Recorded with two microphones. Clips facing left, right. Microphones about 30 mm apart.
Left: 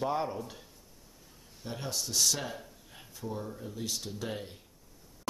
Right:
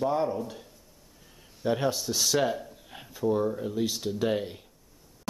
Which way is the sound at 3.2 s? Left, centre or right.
Right.